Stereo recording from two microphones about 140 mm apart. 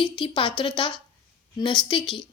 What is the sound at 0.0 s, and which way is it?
A woman's voice, 35° left (ahead or behind).